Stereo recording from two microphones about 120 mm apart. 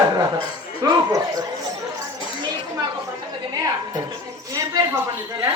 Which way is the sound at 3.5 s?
30° right (ahead or behind).